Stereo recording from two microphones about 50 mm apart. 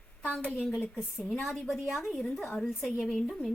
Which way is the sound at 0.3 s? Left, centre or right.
Left.